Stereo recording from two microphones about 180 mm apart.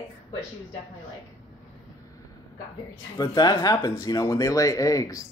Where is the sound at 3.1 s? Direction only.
20° left (ahead or behind).